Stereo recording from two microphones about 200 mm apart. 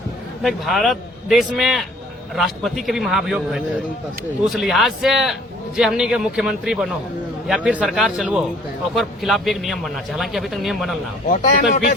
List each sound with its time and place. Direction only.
0.4 s a man's voice: centre (ahead or behind)
11.3 s a man's voice: 40° left (ahead or behind)